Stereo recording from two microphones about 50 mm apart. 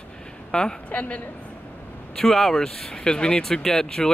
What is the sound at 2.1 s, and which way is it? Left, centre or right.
Speech, centre.